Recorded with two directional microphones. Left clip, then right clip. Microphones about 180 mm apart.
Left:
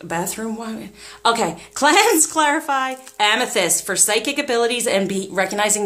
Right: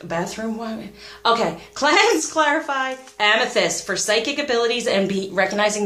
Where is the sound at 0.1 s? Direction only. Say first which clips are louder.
Left 1 dB; 40° left (ahead or behind).